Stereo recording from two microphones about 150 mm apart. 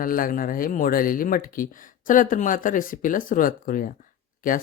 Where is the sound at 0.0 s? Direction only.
70° left (ahead or behind).